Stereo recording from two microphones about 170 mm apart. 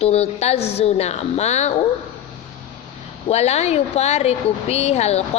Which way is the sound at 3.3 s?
40° left (ahead or behind).